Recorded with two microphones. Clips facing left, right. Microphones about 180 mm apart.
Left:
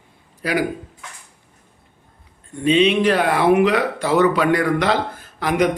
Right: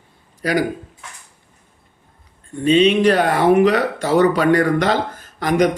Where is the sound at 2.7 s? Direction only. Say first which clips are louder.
Right 3 dB; 40° right (ahead or behind).